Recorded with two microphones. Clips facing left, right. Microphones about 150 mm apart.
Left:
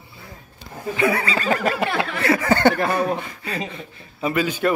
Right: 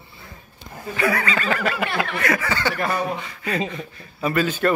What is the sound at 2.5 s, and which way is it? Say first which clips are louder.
Speech: left 6 dB; 55° left (ahead or behind).